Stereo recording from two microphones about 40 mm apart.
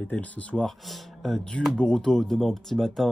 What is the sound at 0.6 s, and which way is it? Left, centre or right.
Speech, centre.